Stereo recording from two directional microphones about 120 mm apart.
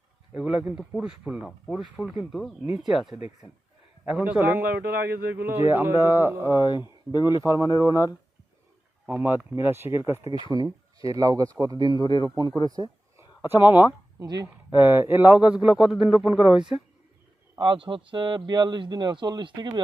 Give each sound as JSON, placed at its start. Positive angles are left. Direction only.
{"t": 0.3, "sound": "speech", "side_deg": -10}
{"t": 6.6, "sound": "speech", "side_deg": 40}
{"t": 9.0, "sound": "speech", "side_deg": -15}
{"t": 10.5, "sound": "speech", "side_deg": -30}
{"t": 12.0, "sound": "speech", "side_deg": 40}
{"t": 12.7, "sound": "a sound", "side_deg": -30}
{"t": 13.6, "sound": "speech", "side_deg": -15}
{"t": 14.2, "sound": "speech", "side_deg": -35}
{"t": 14.4, "sound": "speech", "side_deg": -15}
{"t": 17.6, "sound": "speech", "side_deg": -45}